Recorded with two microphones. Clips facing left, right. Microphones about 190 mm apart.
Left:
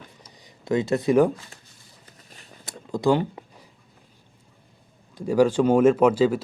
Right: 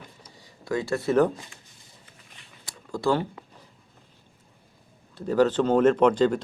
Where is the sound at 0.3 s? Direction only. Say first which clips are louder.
Left 5 dB; 20° left (ahead or behind).